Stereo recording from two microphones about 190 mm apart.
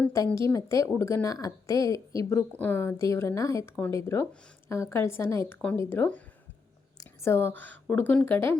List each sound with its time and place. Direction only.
0.0 s a woman's voice: 10° left (ahead or behind)